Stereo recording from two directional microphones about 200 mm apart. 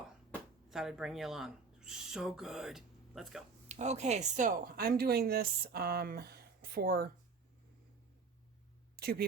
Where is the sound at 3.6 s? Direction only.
35° right (ahead or behind); by 7.0 s 50° right (ahead or behind).